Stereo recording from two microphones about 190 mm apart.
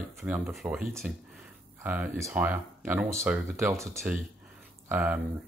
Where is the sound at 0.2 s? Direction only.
Centre (ahead or behind).